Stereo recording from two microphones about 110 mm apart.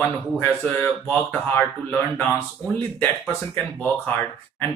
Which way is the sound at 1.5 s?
15° left (ahead or behind).